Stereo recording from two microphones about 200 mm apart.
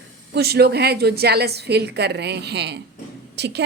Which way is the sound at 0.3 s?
55° right (ahead or behind).